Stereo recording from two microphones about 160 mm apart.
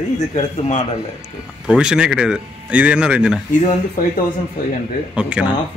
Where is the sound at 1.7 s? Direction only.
5° right (ahead or behind).